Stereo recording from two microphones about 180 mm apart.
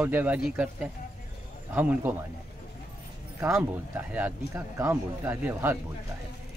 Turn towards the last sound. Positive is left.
turn(degrees=-10)  # may be behind; listen again after turning